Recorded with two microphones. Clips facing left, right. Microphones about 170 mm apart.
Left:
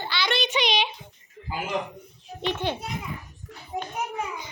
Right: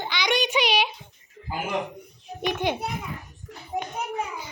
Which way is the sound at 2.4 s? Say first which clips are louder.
Right 2 dB; 15° right (ahead or behind).